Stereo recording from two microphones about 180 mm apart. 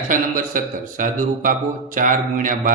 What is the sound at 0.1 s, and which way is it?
A man's voice, 50° right (ahead or behind).